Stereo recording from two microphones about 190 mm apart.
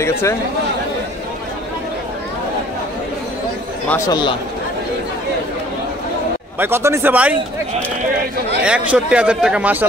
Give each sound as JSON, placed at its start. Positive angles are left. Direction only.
{"t": 0.0, "sound": "speech", "side_deg": 15}
{"t": 4.1, "sound": "speech", "side_deg": 25}
{"t": 6.6, "sound": "speech", "side_deg": -15}
{"t": 8.6, "sound": "a man's voice", "side_deg": -5}